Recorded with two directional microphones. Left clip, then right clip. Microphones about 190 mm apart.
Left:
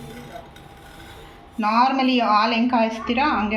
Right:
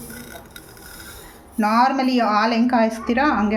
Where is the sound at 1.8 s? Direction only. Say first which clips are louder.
Even; 50° right (ahead or behind).